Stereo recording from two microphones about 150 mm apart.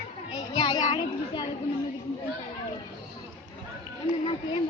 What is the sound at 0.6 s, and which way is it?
Speech, 30° left (ahead or behind).